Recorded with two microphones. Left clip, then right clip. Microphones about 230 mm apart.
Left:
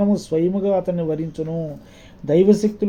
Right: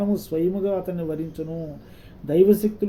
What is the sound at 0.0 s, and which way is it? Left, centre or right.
Speech, left.